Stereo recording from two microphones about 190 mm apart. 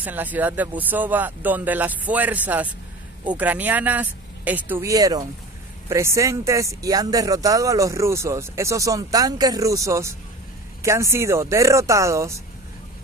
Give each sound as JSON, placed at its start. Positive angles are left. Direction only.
{"t": 0.0, "sound": "speech", "side_deg": -10}